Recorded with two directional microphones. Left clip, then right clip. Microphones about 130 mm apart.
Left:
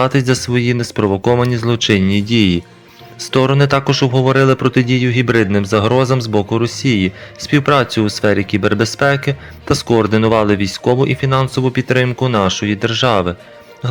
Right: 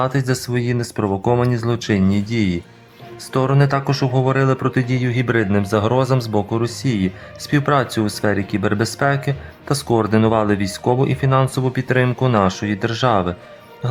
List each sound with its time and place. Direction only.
0.0 s speech: 20° left (ahead or behind)